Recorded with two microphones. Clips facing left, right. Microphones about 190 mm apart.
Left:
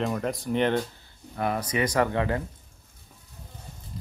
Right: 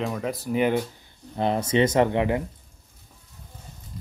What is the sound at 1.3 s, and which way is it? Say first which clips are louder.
Speech: right 5 dB; 25° right (ahead or behind).